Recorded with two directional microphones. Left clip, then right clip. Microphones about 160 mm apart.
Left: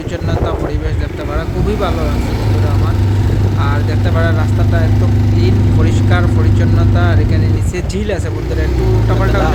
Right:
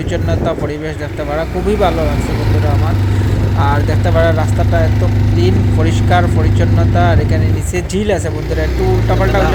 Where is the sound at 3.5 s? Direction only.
15° right (ahead or behind).